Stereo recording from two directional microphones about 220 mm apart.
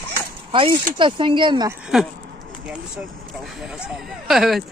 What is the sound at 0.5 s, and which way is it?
Speech, 20° right (ahead or behind).